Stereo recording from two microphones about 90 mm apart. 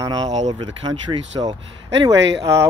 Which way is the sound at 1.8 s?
35° right (ahead or behind).